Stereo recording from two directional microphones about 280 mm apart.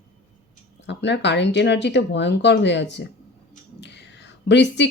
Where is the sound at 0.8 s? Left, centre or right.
Left.